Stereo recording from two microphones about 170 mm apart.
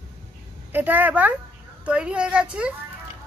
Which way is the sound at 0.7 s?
10° right (ahead or behind).